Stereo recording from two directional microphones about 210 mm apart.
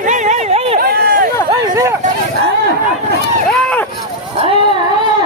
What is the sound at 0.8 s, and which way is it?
Run, 45° right (ahead or behind).